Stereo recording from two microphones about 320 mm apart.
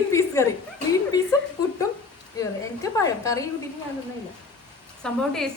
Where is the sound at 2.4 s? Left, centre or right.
Centre.